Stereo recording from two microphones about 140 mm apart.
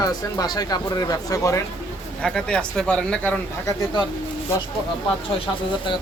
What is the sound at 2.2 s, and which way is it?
Speech, 5° left (ahead or behind).